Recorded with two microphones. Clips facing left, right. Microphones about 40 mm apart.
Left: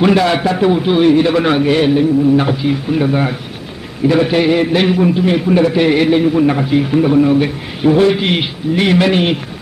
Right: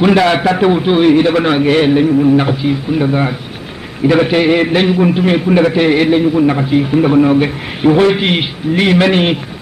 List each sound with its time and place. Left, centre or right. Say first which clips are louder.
0.1 s a man's voice: right 2 dB; right
0.8 s a man's voice: right 1 dB; right; by 3.3 s centre
4.1 s a man's voice: right 2 dB; right
5.8 s a man's voice: right 1 dB; centre
7.0 s a man's voice: right 1 dB; right